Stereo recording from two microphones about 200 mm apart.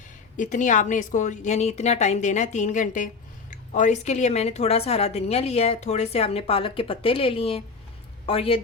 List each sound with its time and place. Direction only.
0.3 s a woman's voice: 40° left (ahead or behind)